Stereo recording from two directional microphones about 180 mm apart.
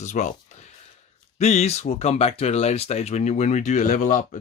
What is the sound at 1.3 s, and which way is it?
Speech, 35° left (ahead or behind).